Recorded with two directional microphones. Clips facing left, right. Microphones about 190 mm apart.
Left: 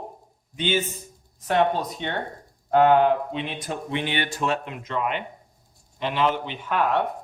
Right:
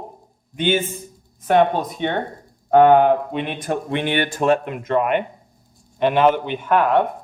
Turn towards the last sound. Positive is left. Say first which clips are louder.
# right 6 dB
turn(degrees=-55)  # may be behind; listen again after turning